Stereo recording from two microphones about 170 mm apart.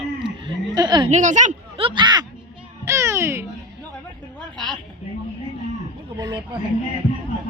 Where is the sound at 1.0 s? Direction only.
45° right (ahead or behind).